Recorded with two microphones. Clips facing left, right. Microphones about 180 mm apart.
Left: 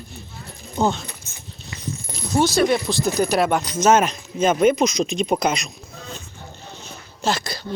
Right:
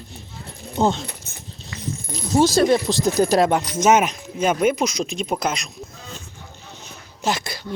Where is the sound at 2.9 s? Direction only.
30° right (ahead or behind).